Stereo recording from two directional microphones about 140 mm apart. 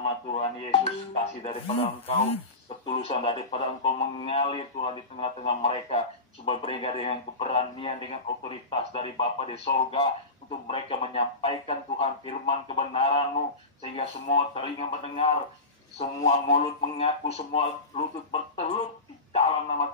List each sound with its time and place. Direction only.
0.3 s a man's voice: 45° left (ahead or behind)
19.3 s a man's voice: 45° left (ahead or behind)